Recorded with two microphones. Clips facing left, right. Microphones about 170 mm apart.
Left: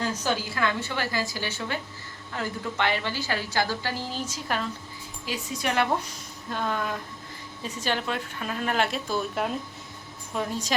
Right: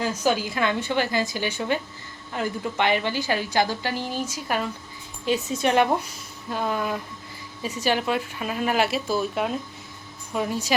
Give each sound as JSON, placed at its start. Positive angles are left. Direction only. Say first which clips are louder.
{"t": 0.0, "sound": "a woman's voice", "louder": "right 4 dB", "side_deg": -10}
{"t": 5.2, "sound": "a woman's voice", "louder": "right 7 dB", "side_deg": -25}